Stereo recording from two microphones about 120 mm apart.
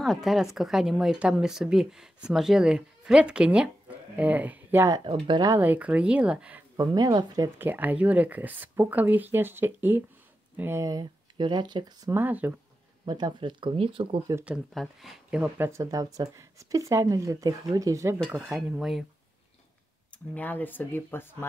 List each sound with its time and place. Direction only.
0.0 s speech: centre (ahead or behind)
5.0 s speech: 45° right (ahead or behind)
5.6 s speech: 15° right (ahead or behind)
6.8 s speech: 35° right (ahead or behind)
7.5 s speech: 15° right (ahead or behind)
10.8 s speech: 35° right (ahead or behind)
12.1 s speech: 15° right (ahead or behind)
13.0 s speech: 35° right (ahead or behind)
14.4 s speech: 10° right (ahead or behind)
15.4 s speech: 20° right (ahead or behind)
18.3 s speech: 10° right (ahead or behind)
18.7 s speech: centre (ahead or behind)
20.3 s speech: 15° left (ahead or behind)